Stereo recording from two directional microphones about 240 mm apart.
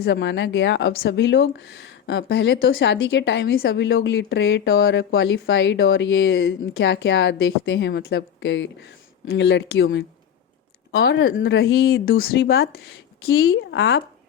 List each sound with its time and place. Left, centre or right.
0.0 s speech: left
11.2 s speech: left